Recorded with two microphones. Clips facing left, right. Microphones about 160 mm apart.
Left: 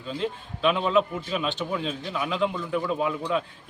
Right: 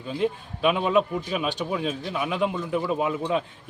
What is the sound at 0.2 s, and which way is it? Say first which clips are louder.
A man's voice: right 3 dB; 10° right (ahead or behind).